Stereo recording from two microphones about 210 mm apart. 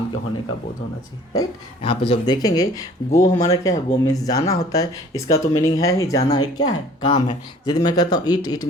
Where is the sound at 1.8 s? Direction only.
25° left (ahead or behind).